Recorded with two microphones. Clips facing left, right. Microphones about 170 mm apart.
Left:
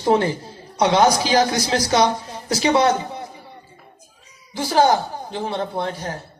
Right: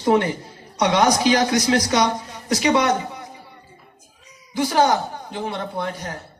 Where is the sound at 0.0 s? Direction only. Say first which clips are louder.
Even; 30° left (ahead or behind).